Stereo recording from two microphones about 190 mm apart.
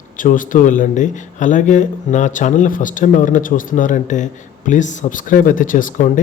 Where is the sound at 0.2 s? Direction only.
45° left (ahead or behind).